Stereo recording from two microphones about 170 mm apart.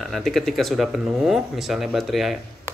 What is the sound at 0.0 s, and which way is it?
Speech, centre (ahead or behind).